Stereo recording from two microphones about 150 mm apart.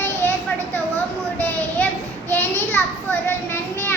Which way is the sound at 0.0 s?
15° left (ahead or behind).